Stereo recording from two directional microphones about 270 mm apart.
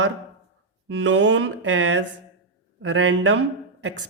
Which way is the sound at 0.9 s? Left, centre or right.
Right.